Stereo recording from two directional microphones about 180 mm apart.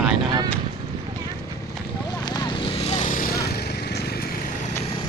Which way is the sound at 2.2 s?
25° left (ahead or behind).